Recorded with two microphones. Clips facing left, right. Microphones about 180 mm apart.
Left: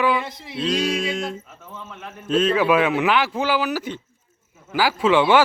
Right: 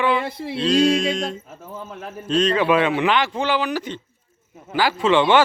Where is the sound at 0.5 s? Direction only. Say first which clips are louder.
Right 5 dB; 5° left (ahead or behind).